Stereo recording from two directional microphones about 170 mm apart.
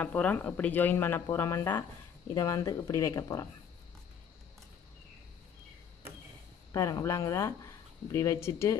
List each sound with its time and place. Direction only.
0.0 s speech: 10° left (ahead or behind)
6.7 s speech: 20° left (ahead or behind)